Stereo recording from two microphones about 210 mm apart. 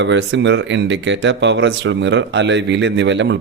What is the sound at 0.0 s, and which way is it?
A man's voice, 60° right (ahead or behind).